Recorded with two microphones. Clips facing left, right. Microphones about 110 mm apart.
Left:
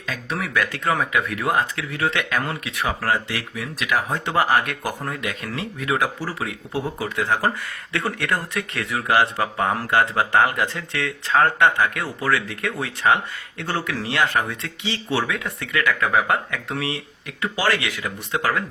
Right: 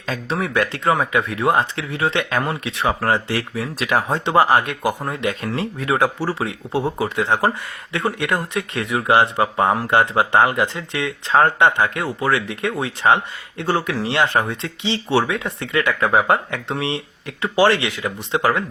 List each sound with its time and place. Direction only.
0.0 s speech: 30° right (ahead or behind)
4.3 s speech: 25° right (ahead or behind)